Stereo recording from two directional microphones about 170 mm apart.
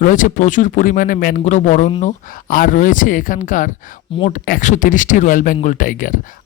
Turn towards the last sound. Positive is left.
turn(degrees=50)  # may be behind; listen again after turning